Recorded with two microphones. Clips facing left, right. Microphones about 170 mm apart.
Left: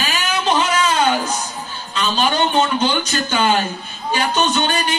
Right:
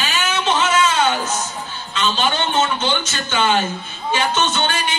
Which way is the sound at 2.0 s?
35° left (ahead or behind).